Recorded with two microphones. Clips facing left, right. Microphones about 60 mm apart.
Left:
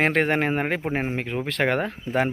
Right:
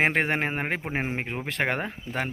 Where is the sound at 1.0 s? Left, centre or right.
Right.